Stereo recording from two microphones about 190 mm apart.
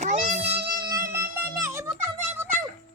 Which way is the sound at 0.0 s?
40° right (ahead or behind).